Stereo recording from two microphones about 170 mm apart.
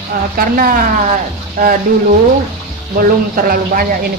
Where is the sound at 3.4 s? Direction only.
55° right (ahead or behind).